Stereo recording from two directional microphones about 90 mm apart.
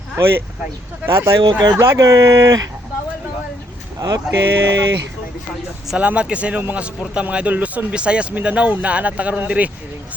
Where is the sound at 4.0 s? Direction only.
45° right (ahead or behind).